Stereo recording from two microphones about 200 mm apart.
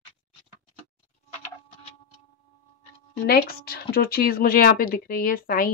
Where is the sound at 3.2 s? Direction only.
50° left (ahead or behind).